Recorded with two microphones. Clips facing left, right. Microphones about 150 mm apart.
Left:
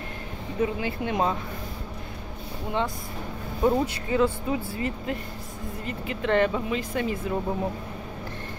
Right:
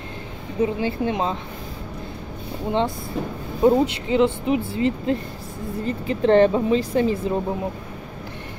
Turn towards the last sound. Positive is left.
turn(degrees=-30)  # may be behind; listen again after turning